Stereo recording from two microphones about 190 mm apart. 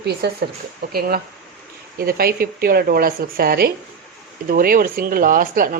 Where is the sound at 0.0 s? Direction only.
60° right (ahead or behind).